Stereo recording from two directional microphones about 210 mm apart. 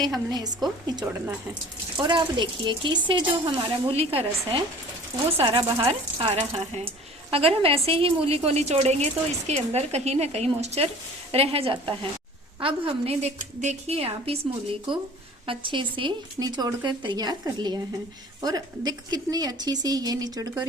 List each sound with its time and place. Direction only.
0.3 s speech: 20° right (ahead or behind)
2.0 s a woman's voice: 20° right (ahead or behind)